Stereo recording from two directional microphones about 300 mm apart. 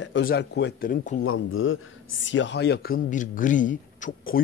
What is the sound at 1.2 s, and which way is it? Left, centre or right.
Speech, left.